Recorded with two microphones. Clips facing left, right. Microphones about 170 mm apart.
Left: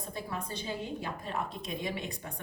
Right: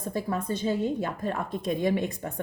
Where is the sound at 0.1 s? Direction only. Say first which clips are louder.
Right 10 dB; 45° right (ahead or behind).